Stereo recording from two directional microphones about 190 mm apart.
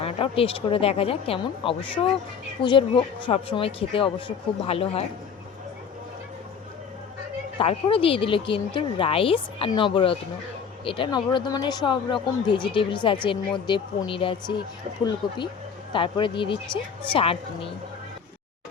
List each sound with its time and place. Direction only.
0.0 s speech: 30° left (ahead or behind)
7.6 s speech: 30° left (ahead or behind)
15.9 s speech: 25° left (ahead or behind)